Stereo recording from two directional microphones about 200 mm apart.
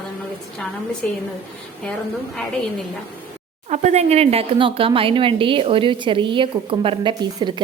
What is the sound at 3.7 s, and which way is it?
Speech, 35° right (ahead or behind).